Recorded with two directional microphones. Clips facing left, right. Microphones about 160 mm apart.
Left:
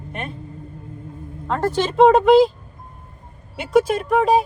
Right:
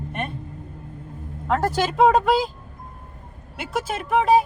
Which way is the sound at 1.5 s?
10° right (ahead or behind).